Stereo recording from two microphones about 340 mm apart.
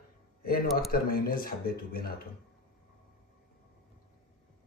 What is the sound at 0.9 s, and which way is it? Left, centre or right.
Speech, left.